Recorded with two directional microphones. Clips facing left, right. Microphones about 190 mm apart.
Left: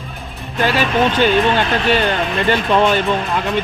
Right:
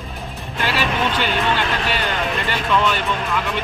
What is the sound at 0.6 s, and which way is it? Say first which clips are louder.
Speech: left 6 dB; 45° left (ahead or behind).